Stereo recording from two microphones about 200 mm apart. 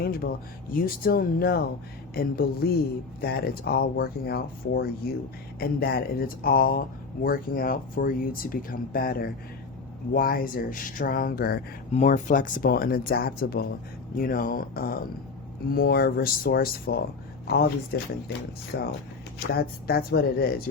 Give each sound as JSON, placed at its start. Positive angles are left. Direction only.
{"t": 0.0, "sound": "speech", "side_deg": 50}
{"t": 11.9, "sound": "speech", "side_deg": 35}